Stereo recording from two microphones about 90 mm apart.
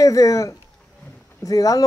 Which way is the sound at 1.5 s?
40° left (ahead or behind).